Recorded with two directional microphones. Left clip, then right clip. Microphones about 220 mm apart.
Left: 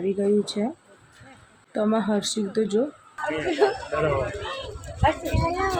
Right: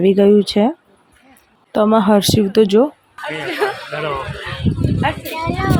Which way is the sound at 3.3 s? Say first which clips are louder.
Right 3 dB; 5° right (ahead or behind).